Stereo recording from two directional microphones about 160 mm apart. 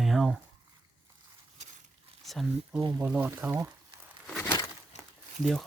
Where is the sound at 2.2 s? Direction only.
Centre (ahead or behind).